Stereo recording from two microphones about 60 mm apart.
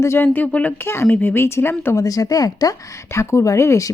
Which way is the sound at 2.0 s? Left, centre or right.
Left.